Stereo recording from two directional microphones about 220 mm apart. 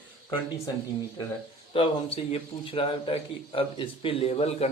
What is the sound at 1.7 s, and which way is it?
A man's voice, 25° left (ahead or behind).